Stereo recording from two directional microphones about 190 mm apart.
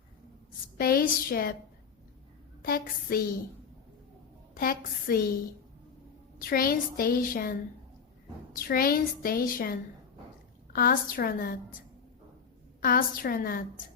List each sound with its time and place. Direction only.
0.8 s a woman's voice: 50° left (ahead or behind)
2.6 s a woman's voice: 50° left (ahead or behind)
4.5 s a woman's voice: 50° left (ahead or behind)
6.4 s a woman's voice: 50° left (ahead or behind)
8.5 s a woman's voice: 50° left (ahead or behind)
12.8 s a woman's voice: 50° left (ahead or behind)